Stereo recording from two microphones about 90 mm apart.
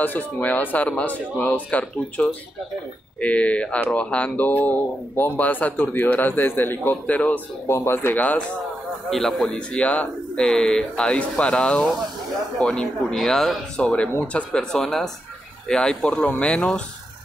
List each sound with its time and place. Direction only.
0.0 s speech: 20° left (ahead or behind)
7.6 s speech: 30° left (ahead or behind)
9.1 s speech: 5° left (ahead or behind)